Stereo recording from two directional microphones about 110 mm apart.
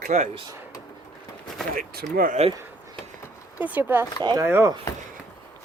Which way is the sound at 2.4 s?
80° right.